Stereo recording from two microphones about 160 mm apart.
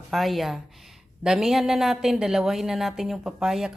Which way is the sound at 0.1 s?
Centre (ahead or behind).